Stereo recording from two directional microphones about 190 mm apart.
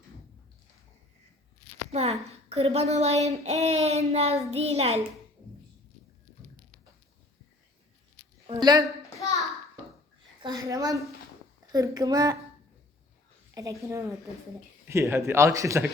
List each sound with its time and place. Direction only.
1.9 s speech: 35° right (ahead or behind)
3.2 s child singing: 35° right (ahead or behind)
8.4 s speech: 20° right (ahead or behind)
10.4 s speech: 20° right (ahead or behind)
13.5 s a man's voice: 15° right (ahead or behind)